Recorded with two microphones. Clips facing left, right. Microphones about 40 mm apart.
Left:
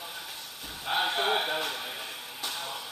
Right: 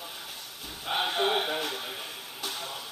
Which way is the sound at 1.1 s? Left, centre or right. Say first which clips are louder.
Even; centre.